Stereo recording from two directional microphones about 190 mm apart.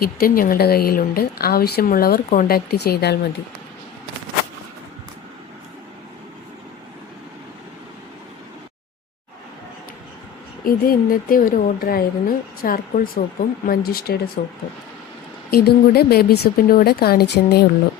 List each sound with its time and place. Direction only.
0.0 s a woman's voice: 50° left (ahead or behind)
10.6 s a woman's voice: 50° left (ahead or behind)
15.4 s a woman's voice: 55° left (ahead or behind)